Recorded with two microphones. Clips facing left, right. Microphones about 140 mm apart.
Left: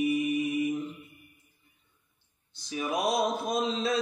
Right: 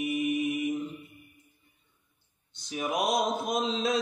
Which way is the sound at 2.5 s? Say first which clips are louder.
Even; 20° right (ahead or behind).